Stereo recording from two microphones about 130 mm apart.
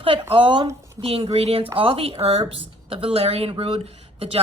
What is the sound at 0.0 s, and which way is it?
A woman's voice, 45° right (ahead or behind).